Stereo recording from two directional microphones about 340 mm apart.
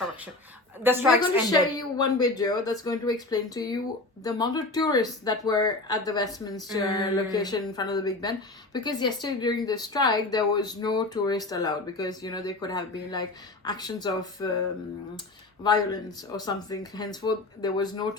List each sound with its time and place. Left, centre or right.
0.8 s a woman's voice: centre
1.5 s speech: centre
15.6 s speech: centre